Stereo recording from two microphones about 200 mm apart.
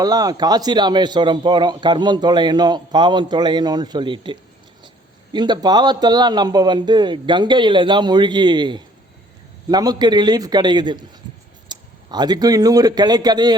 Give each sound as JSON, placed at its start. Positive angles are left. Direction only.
{"t": 0.0, "sound": "a man's voice", "side_deg": -20}